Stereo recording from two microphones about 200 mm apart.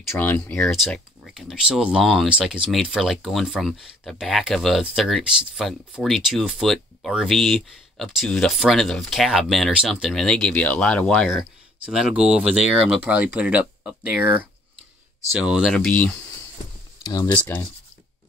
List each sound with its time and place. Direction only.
0.2 s speech: 5° left (ahead or behind)
17.0 s speech: 20° left (ahead or behind)